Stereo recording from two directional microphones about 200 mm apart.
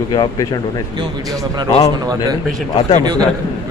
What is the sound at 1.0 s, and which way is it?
Speech, 15° right (ahead or behind).